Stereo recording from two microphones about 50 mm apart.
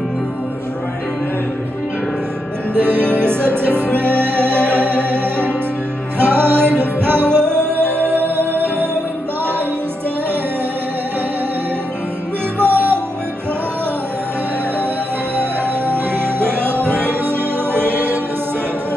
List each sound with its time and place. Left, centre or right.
2.7 s music: right
6.1 s music: right
12.5 s music: right
15.9 s music: right